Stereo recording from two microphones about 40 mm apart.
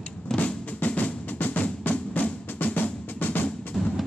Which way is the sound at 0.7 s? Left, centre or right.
Left.